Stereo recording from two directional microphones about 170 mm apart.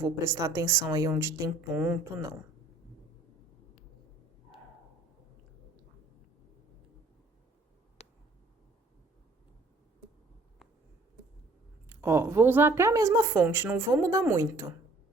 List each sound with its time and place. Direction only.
0.0 s a woman's voice: 15° right (ahead or behind)
8.0 s a sound: 40° left (ahead or behind)
11.9 s a woman's voice: 15° right (ahead or behind)